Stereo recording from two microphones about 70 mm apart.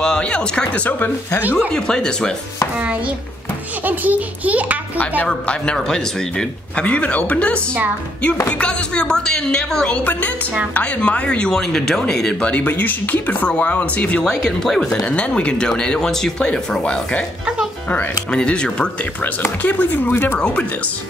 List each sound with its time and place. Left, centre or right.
0.0 s speech: centre
1.4 s a child's voice: right
1.7 s speech: centre
3.8 s a child's voice: right
5.5 s speech: centre
14.2 s speech: centre
18.3 s speech: centre
19.4 s speech: left
20.3 s speech: centre